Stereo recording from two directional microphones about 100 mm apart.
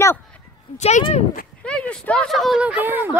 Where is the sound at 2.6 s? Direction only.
15° right (ahead or behind).